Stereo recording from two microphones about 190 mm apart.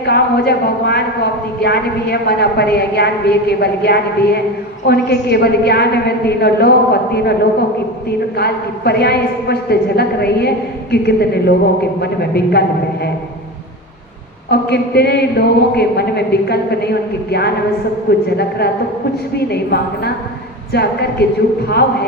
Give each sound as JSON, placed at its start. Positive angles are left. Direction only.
{"t": 0.0, "sound": "a man's voice", "side_deg": 60}
{"t": 8.4, "sound": "a man's voice", "side_deg": 60}
{"t": 14.5, "sound": "a man's voice", "side_deg": 60}
{"t": 19.5, "sound": "a man's voice", "side_deg": 60}